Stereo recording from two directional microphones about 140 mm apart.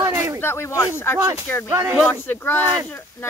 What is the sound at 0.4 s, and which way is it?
Speech, 15° left (ahead or behind).